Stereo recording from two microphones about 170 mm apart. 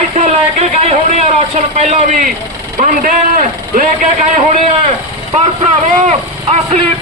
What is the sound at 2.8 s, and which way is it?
A man's voice, 50° right (ahead or behind).